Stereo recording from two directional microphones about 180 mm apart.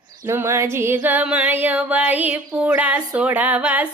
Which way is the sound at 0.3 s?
15° right (ahead or behind).